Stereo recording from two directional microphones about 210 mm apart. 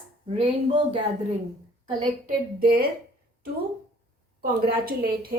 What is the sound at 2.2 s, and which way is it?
Speech, 45° right (ahead or behind).